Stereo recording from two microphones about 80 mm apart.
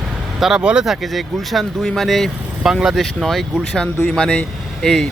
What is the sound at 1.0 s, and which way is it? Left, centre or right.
Speech, centre.